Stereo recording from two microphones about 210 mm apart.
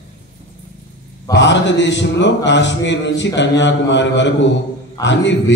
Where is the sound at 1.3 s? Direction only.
55° left (ahead or behind).